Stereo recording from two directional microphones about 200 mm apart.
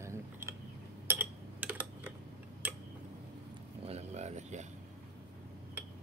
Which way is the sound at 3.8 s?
30° right (ahead or behind).